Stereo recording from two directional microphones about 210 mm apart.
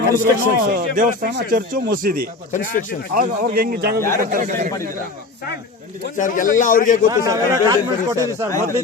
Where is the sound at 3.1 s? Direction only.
45° right (ahead or behind).